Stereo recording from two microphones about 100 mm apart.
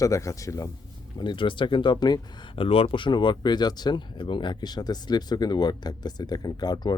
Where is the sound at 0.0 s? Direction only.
30° left (ahead or behind).